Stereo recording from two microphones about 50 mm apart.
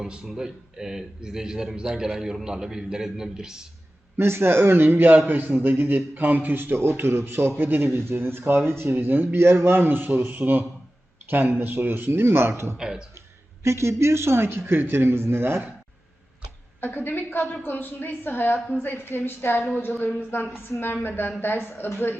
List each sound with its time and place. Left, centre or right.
0.0 s a man's voice: centre
4.2 s a man's voice: right
12.7 s a man's voice: centre
13.7 s a man's voice: right
16.8 s a woman's voice: left
20.7 s a woman's voice: left